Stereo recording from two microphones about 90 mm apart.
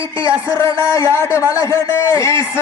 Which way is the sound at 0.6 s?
35° left (ahead or behind).